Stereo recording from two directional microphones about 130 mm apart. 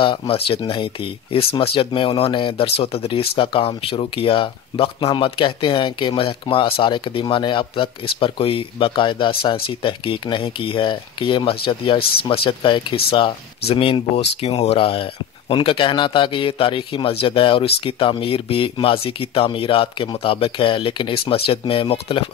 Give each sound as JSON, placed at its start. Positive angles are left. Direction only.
{"t": 0.3, "sound": "speech", "side_deg": 40}